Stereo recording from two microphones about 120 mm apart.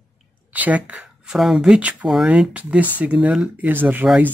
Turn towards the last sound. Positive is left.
turn(degrees=-10)  # may be behind; listen again after turning